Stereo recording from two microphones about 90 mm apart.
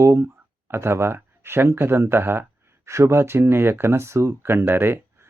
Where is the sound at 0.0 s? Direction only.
35° right (ahead or behind).